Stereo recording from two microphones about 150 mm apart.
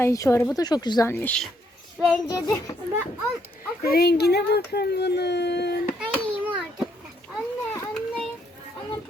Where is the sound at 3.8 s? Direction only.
90° left.